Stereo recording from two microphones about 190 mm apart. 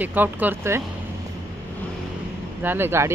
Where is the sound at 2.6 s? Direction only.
10° right (ahead or behind).